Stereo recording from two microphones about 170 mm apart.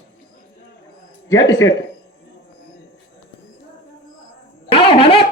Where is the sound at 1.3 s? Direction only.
20° left (ahead or behind).